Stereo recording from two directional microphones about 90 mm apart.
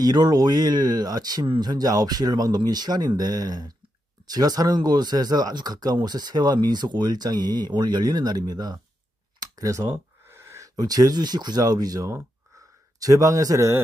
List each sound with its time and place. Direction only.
0.0 s speech: 50° right (ahead or behind)
9.4 s a sound: 40° right (ahead or behind)
10.8 s speech: 45° right (ahead or behind)